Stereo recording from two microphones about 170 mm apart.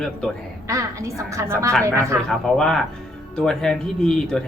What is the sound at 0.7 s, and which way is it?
Speech, 20° right (ahead or behind).